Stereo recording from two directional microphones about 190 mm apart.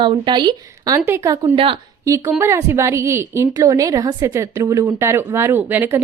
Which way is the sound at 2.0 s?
15° right (ahead or behind).